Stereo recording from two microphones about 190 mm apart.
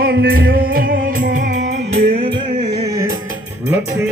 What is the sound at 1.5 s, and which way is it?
Music, 65° right (ahead or behind).